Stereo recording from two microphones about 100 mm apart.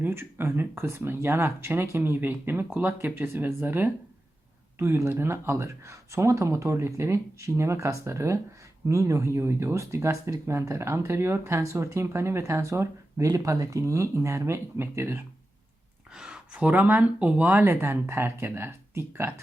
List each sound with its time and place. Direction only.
0.0 s speech: 20° right (ahead or behind)
16.1 s speech: 10° right (ahead or behind)